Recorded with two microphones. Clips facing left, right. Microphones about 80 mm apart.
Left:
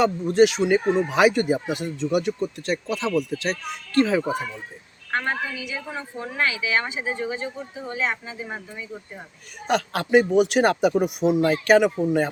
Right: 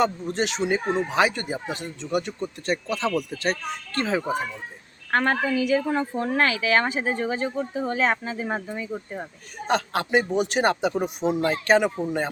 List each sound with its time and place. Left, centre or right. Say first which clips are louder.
0.0 s a man's voice: left 6 dB; centre
5.1 s a woman's voice: right 4 dB; right
9.6 s a man's voice: left 1 dB; centre